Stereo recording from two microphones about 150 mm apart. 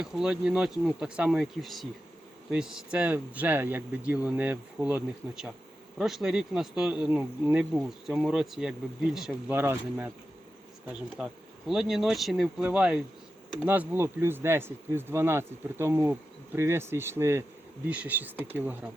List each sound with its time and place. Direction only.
0.0 s insect: 5° right (ahead or behind)
2.5 s speech: 5° right (ahead or behind)
6.0 s insect: centre (ahead or behind)
9.5 s speech: 15° right (ahead or behind)
11.2 s speech: 5° right (ahead or behind)
11.7 s insect: centre (ahead or behind)
13.6 s speech: 10° right (ahead or behind)